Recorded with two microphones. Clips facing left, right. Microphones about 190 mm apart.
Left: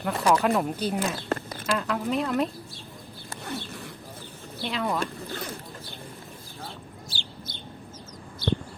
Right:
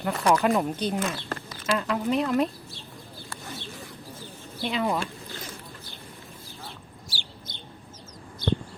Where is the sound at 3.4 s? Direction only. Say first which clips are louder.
Left 6 dB; 65° left (ahead or behind).